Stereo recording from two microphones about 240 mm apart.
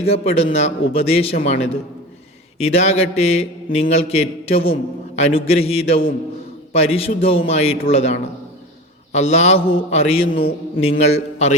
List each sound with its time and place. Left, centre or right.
0.0 s mantra: left
9.1 s mantra: left